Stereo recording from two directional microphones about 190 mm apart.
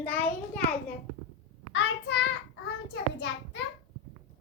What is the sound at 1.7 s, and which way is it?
Speech, 70° left (ahead or behind).